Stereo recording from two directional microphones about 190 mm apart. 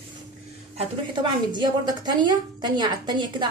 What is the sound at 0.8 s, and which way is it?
A woman's voice, 25° right (ahead or behind).